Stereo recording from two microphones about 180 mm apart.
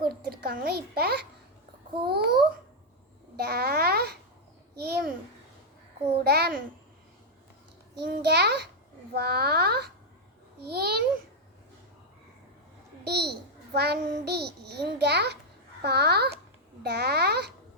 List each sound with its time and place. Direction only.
0.0 s a child's voice: 55° right (ahead or behind)
3.3 s a child's voice: 60° right (ahead or behind)
6.2 s a child's voice: 60° right (ahead or behind)
8.0 s a child's voice: 65° right (ahead or behind)
13.1 s a child's voice: 65° right (ahead or behind)